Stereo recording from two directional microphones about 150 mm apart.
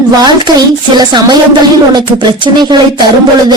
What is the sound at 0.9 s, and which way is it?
Speech, 30° right (ahead or behind).